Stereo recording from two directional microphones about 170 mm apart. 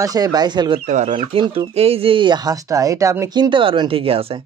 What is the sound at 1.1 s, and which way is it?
Speech, 25° right (ahead or behind).